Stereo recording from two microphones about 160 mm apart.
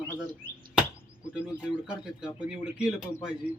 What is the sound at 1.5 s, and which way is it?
Speech, 5° right (ahead or behind).